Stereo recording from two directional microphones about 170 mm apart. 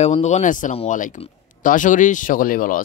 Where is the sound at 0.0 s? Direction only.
40° left (ahead or behind).